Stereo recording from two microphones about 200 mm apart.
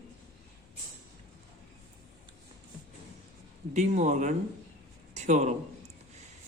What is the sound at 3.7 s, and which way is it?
Speech, 35° right (ahead or behind).